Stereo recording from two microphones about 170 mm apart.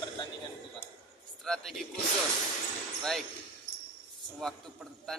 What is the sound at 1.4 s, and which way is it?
Speech, centre (ahead or behind).